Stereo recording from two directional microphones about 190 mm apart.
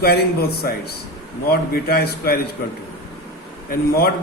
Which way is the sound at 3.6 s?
55° left (ahead or behind).